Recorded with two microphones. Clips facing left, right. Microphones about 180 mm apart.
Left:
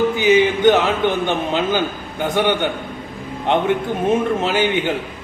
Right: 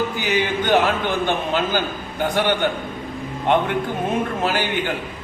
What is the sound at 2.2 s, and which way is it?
Speech, 20° left (ahead or behind).